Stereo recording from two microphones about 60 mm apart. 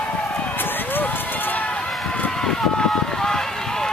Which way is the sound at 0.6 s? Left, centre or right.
Left.